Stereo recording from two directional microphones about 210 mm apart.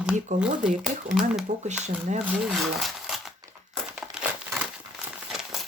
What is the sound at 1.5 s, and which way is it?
Speech, 35° right (ahead or behind).